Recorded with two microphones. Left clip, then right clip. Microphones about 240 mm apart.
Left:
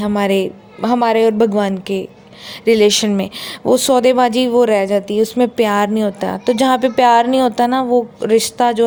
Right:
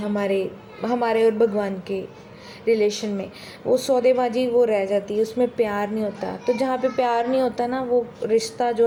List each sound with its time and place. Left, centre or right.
0.0 s speech: left